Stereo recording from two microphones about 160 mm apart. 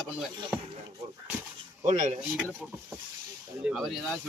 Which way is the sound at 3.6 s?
Centre (ahead or behind).